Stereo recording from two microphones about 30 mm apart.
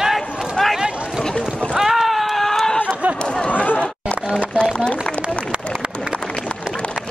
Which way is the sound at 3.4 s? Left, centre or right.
Left.